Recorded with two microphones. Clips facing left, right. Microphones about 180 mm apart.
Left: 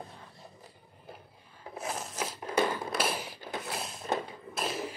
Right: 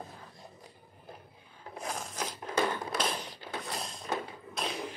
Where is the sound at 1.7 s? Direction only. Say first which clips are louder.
Left 1 dB; 5° left (ahead or behind).